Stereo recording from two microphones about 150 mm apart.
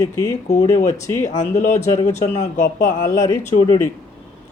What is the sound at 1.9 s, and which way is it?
Speech, 20° left (ahead or behind).